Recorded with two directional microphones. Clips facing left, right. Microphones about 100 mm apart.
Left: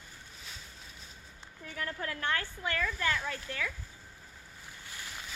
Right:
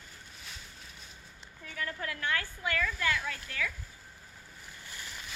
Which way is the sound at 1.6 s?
30° left (ahead or behind).